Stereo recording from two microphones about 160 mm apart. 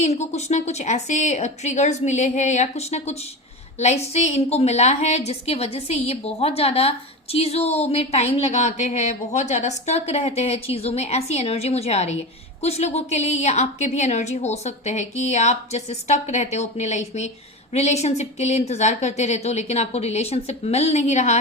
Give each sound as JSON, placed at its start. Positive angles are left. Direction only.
{"t": 0.0, "sound": "a woman's voice", "side_deg": 45}